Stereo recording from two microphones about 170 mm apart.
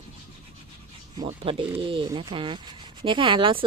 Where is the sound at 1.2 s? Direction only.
35° right (ahead or behind).